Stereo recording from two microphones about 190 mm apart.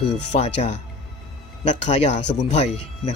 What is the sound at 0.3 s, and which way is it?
Speech, 40° left (ahead or behind).